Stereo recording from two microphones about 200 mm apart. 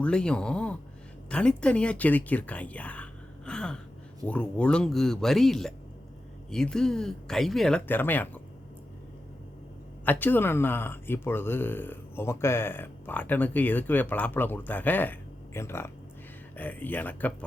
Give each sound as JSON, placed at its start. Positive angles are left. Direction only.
{"t": 0.0, "sound": "speech", "side_deg": 5}
{"t": 10.1, "sound": "speech", "side_deg": 10}